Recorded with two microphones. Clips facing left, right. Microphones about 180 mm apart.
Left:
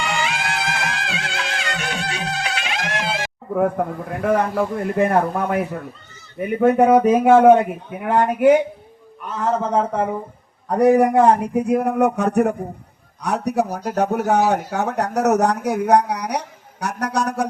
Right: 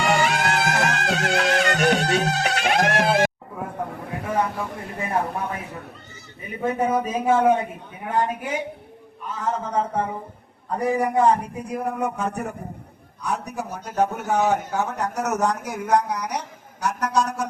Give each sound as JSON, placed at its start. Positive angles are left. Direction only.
{"t": 0.0, "sound": "music", "side_deg": -50}
{"t": 4.2, "sound": "a man's voice", "side_deg": 65}
{"t": 13.7, "sound": "speech", "side_deg": 40}
{"t": 13.9, "sound": "a man's voice", "side_deg": 70}